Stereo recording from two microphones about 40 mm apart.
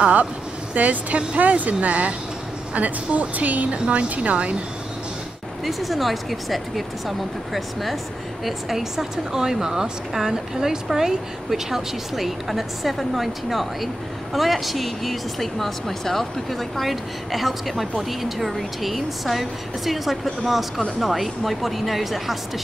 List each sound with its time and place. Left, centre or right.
0.7 s speech: right
3.7 s a woman's voice: right
4.1 s speech: right
5.7 s speech: centre